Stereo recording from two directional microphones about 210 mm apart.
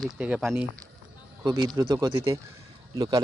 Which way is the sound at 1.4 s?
20° right (ahead or behind).